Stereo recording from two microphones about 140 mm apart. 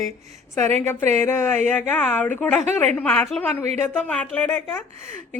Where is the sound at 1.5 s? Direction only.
55° right (ahead or behind).